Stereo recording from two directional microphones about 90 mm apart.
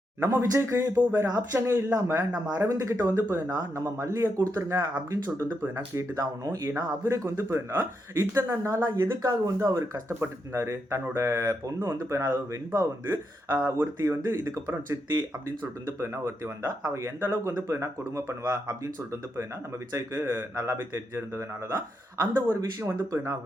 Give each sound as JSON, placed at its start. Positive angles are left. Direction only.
{"t": 0.2, "sound": "speech", "side_deg": -30}
{"t": 2.6, "sound": "speech", "side_deg": -40}
{"t": 3.0, "sound": "speech", "side_deg": -25}
{"t": 5.9, "sound": "speech", "side_deg": -35}
{"t": 19.9, "sound": "speech", "side_deg": -35}